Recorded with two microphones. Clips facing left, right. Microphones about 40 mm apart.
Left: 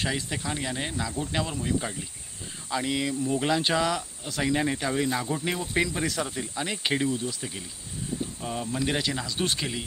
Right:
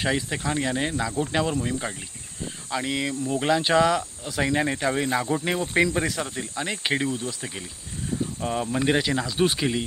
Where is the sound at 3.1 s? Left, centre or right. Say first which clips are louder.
Right 1 dB; centre.